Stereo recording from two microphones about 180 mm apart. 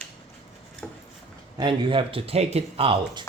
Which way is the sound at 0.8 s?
5° left (ahead or behind).